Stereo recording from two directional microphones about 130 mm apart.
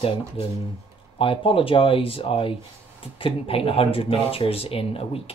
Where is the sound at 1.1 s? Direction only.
45° left (ahead or behind).